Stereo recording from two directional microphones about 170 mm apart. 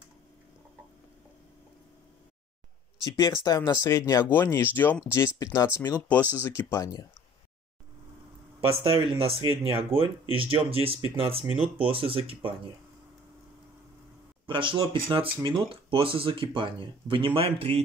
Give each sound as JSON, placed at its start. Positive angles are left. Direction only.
{"t": 3.0, "sound": "speech", "side_deg": 20}
{"t": 8.8, "sound": "speech", "side_deg": -30}
{"t": 14.4, "sound": "speech", "side_deg": -30}